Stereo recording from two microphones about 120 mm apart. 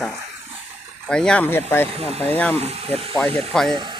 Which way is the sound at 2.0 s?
55° right (ahead or behind).